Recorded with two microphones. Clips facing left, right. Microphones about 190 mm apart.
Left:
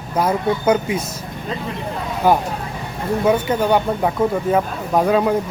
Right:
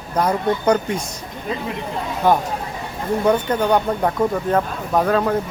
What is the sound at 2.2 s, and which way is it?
Speech, 10° left (ahead or behind).